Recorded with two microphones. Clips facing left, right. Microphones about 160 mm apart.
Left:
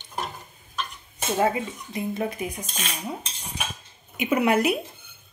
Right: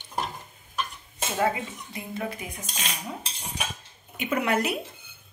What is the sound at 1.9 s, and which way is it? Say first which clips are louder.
Stir: left 6 dB; 20° left (ahead or behind).